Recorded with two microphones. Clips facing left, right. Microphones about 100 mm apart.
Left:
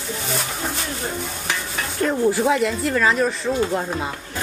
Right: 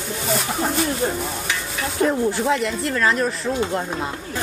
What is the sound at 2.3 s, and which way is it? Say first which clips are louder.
Speech: left 2 dB; 5° left (ahead or behind).